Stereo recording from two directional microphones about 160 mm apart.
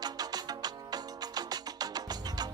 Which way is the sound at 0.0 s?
25° right (ahead or behind).